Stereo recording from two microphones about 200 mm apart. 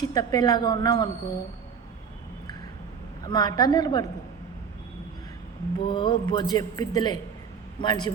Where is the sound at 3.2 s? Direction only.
20° left (ahead or behind).